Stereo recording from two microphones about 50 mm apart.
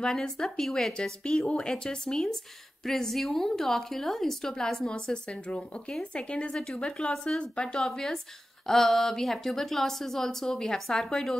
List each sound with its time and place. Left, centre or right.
0.0 s a woman's voice: centre
1.2 s a woman's voice: centre
7.8 s a woman's voice: centre